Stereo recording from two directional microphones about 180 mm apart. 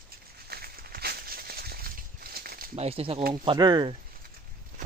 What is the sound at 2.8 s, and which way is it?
A man's voice, 30° right (ahead or behind).